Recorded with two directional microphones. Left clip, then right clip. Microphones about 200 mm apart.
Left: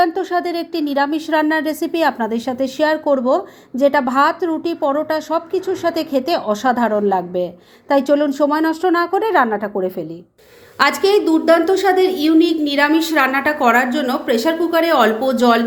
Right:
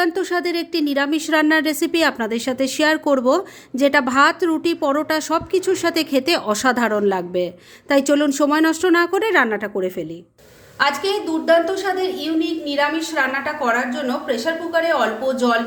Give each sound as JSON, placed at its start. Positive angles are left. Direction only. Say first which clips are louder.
{"t": 0.0, "sound": "a woman's voice", "louder": "left 3 dB", "side_deg": -20}
{"t": 10.8, "sound": "a woman's voice", "louder": "left 5 dB", "side_deg": 35}